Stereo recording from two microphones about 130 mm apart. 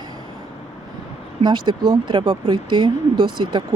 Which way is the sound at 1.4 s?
40° right (ahead or behind).